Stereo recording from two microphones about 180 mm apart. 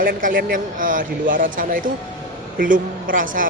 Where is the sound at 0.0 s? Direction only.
50° right (ahead or behind).